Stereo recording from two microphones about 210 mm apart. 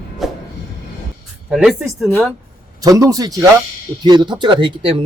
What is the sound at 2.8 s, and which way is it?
A man's voice, 15° right (ahead or behind).